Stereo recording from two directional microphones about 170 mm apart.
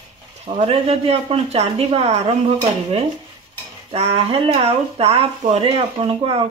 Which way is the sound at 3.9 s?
35° right (ahead or behind).